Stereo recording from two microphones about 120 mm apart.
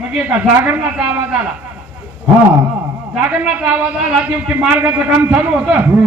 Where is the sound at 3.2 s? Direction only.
10° right (ahead or behind).